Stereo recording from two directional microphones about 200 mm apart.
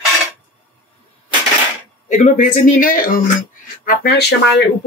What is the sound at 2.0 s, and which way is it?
Speech, 35° left (ahead or behind).